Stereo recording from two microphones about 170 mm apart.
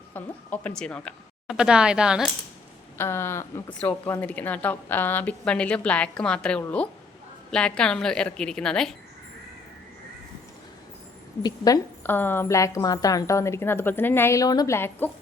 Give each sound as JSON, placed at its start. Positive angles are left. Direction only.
{"t": 0.1, "sound": "a woman's voice", "side_deg": 10}
{"t": 1.5, "sound": "a woman's voice", "side_deg": -5}
{"t": 3.0, "sound": "a woman's voice", "side_deg": 15}
{"t": 11.4, "sound": "a woman's voice", "side_deg": 20}